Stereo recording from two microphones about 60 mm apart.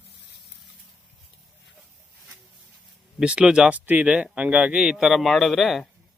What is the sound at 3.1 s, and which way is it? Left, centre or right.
A man's voice, centre.